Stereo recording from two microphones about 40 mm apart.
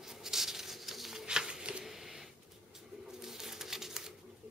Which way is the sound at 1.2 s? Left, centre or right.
Right.